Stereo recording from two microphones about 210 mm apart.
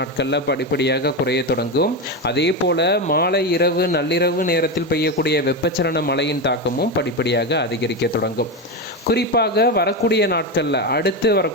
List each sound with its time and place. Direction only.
0.0 s speech: 55° left (ahead or behind)